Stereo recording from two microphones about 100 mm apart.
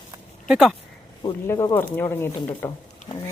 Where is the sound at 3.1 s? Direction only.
50° left (ahead or behind).